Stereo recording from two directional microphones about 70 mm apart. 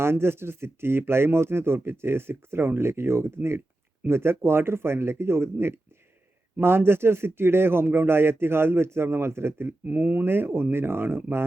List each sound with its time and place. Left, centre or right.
0.0 s speech: right